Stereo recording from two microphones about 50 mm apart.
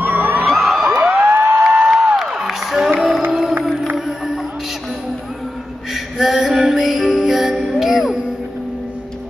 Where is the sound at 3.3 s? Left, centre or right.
Centre.